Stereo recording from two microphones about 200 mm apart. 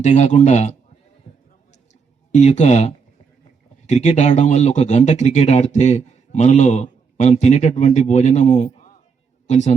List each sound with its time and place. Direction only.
0.0 s speech: 35° left (ahead or behind)
1.3 s a sound: 35° left (ahead or behind)
2.3 s speech: 35° left (ahead or behind)